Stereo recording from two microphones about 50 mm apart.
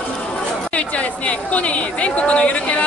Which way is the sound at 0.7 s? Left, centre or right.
Left.